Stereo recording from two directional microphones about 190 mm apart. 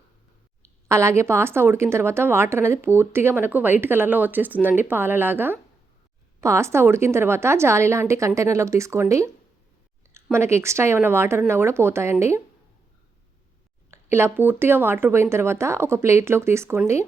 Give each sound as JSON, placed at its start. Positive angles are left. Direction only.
{"t": 0.9, "sound": "a woman's voice", "side_deg": -15}
{"t": 10.3, "sound": "a woman's voice", "side_deg": -15}
{"t": 13.9, "sound": "a woman's voice", "side_deg": -15}